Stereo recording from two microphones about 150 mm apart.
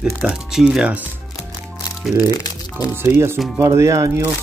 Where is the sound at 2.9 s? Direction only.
15° right (ahead or behind).